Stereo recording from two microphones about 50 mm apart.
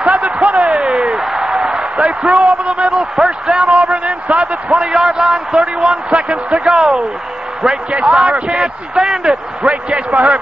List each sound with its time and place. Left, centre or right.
0.0 s basketball bounce: right
0.7 s a sound: centre
2.3 s a man's voice: right
6.7 s speech: centre
7.9 s a man's voice: right